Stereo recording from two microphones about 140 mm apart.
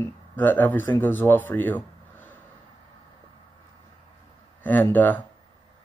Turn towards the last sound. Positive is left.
turn(degrees=10)  # may be behind; listen again after turning